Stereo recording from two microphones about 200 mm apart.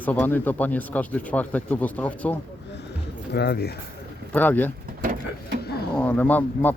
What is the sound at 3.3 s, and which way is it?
Speech, 55° left (ahead or behind).